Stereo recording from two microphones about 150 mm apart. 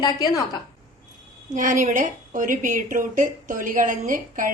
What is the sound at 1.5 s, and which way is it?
Speech, 60° right (ahead or behind).